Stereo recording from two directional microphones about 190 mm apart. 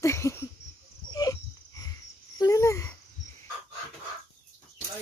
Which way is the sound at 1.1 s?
20° left (ahead or behind).